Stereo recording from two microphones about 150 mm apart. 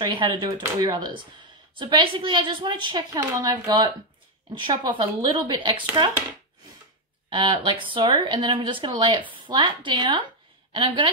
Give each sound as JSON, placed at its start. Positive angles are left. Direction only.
{"t": 0.0, "sound": "a woman's voice", "side_deg": -30}
{"t": 7.2, "sound": "a woman's voice", "side_deg": -35}